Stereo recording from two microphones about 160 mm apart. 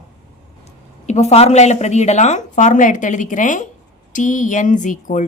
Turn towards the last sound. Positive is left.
turn(degrees=50)  # may be behind; listen again after turning